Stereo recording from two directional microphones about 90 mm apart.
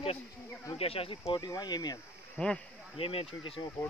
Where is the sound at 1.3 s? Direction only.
50° left (ahead or behind).